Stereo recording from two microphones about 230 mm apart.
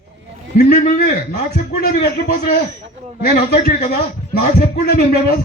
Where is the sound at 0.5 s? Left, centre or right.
Left.